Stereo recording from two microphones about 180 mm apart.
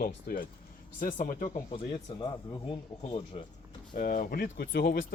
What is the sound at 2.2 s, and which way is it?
Speech, 25° left (ahead or behind).